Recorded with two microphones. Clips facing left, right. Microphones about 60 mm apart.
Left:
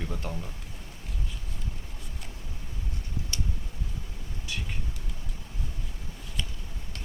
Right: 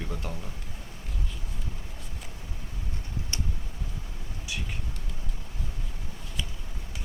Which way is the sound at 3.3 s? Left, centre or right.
Right.